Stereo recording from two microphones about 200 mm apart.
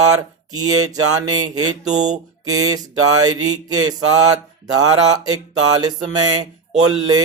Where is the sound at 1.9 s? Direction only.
35° right (ahead or behind).